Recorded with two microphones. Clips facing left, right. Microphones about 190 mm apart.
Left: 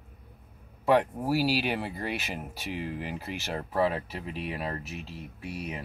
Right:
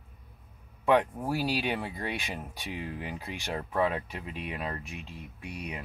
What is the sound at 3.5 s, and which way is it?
Speech, 35° left (ahead or behind).